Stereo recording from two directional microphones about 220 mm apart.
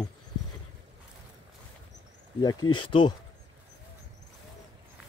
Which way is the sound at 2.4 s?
20° left (ahead or behind).